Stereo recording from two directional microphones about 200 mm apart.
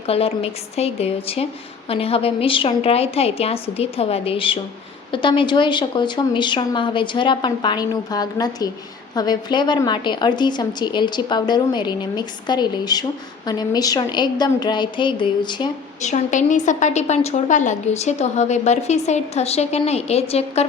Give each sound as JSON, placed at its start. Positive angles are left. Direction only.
{"t": 0.1, "sound": "a woman's voice", "side_deg": 30}
{"t": 16.0, "sound": "a woman's voice", "side_deg": 35}